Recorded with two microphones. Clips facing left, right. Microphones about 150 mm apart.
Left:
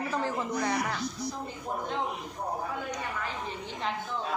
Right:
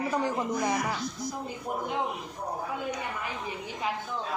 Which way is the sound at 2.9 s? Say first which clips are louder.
Right 1 dB; 10° right (ahead or behind).